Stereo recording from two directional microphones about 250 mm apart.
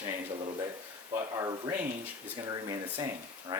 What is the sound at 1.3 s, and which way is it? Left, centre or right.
Speech, centre.